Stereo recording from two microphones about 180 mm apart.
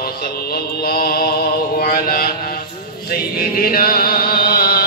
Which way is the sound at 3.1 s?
55° left (ahead or behind).